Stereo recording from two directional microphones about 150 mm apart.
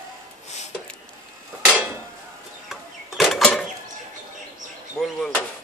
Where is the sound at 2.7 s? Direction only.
Centre (ahead or behind).